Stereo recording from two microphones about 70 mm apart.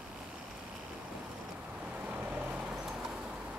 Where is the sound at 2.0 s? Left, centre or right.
Right.